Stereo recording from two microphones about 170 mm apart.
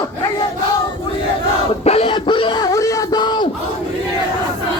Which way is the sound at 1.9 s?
35° left (ahead or behind).